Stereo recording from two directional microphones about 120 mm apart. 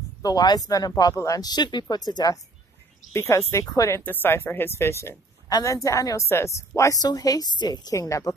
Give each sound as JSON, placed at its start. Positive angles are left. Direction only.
{"t": 0.2, "sound": "speech", "side_deg": 35}
{"t": 4.0, "sound": "speech", "side_deg": 15}